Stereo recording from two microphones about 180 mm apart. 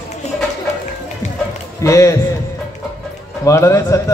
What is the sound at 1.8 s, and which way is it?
Speech, 15° left (ahead or behind).